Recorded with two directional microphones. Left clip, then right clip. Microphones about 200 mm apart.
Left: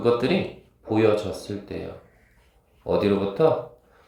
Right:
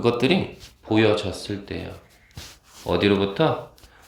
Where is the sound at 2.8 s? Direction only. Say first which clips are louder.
Right 2 dB; 30° right (ahead or behind).